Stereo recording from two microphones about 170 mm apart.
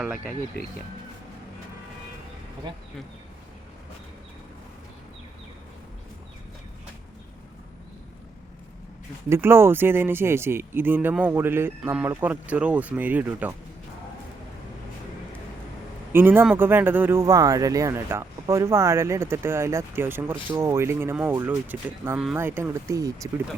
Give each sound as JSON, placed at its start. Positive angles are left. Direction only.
{"t": 0.6, "sound": "speech", "side_deg": 70}
{"t": 9.3, "sound": "speech", "side_deg": -15}
{"t": 16.1, "sound": "speech", "side_deg": -15}